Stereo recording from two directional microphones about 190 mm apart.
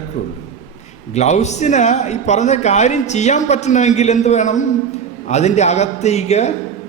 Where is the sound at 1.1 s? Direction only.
35° left (ahead or behind).